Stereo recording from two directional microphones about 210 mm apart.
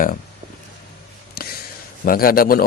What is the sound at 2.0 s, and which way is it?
Speech, 45° left (ahead or behind).